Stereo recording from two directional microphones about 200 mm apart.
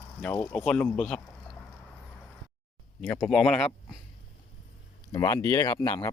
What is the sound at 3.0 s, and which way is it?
Speech, centre (ahead or behind).